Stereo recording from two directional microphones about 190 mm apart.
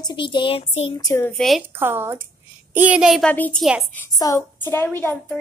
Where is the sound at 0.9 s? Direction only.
15° left (ahead or behind).